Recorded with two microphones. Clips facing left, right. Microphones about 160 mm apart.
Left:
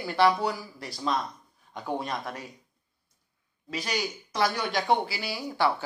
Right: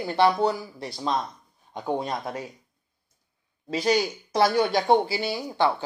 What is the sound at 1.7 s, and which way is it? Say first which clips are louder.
Speech: right 4 dB; 25° right (ahead or behind).